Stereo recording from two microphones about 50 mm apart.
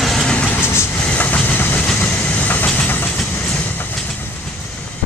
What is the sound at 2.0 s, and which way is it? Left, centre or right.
Train, left.